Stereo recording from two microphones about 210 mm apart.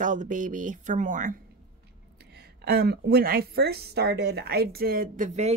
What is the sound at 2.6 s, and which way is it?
A woman's voice, 50° right (ahead or behind).